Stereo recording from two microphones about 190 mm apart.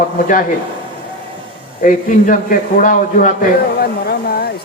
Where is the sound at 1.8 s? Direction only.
45° left (ahead or behind).